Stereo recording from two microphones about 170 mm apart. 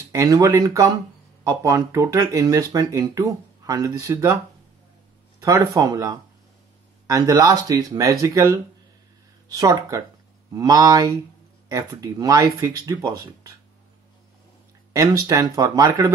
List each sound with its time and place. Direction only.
0.1 s speech: 20° right (ahead or behind)
5.4 s speech: 20° right (ahead or behind)
14.9 s speech: 20° right (ahead or behind)